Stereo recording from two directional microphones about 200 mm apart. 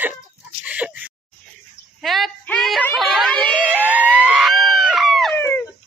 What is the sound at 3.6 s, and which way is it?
Theremin, 10° right (ahead or behind).